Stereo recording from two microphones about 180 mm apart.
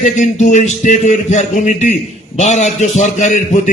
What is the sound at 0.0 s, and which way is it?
A man's voice, 40° left (ahead or behind).